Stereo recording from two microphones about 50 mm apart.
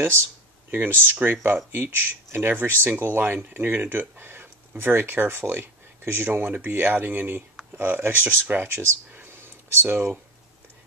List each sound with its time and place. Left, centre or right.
0.7 s speech: right
1.0 s speech: right
9.2 s a sound: right